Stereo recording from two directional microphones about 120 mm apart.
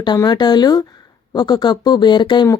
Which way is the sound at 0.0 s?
35° left (ahead or behind).